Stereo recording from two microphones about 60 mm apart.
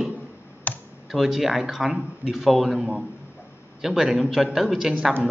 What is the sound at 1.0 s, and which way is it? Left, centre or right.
Speech, centre.